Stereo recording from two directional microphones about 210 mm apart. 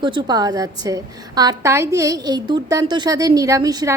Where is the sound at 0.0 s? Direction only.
20° right (ahead or behind).